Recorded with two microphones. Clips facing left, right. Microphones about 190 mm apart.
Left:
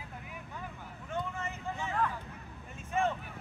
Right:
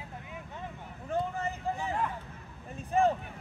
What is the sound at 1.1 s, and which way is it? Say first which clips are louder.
Vehicle: right 5 dB; 35° right (ahead or behind).